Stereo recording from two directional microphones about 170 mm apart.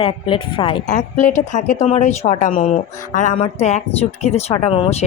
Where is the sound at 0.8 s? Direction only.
45° left (ahead or behind).